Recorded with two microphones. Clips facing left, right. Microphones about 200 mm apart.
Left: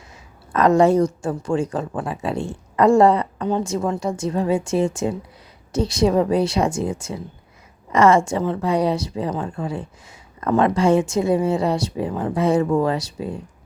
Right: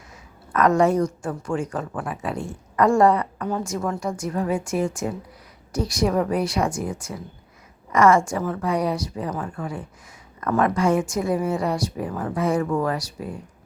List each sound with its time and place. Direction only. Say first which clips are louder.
0.5 s a woman's voice: left 3 dB; 30° left (ahead or behind)